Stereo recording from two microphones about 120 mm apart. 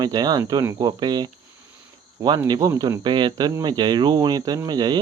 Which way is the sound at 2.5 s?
30° right (ahead or behind).